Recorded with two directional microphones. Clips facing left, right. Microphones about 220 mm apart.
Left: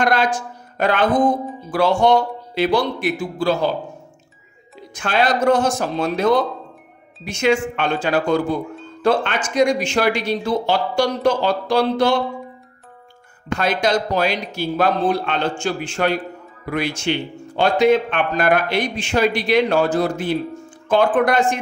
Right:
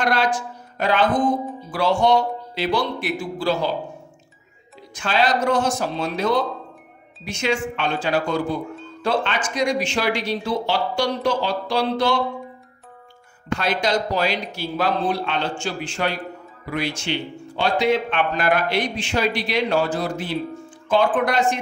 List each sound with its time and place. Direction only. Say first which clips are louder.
0.0 s a man's voice: left 3 dB; 50° left (ahead or behind)
4.9 s a man's voice: left 2 dB; 55° left (ahead or behind)
7.2 s a man's voice: left 5 dB; 50° left (ahead or behind)
13.6 s a man's voice: left 3 dB; 50° left (ahead or behind)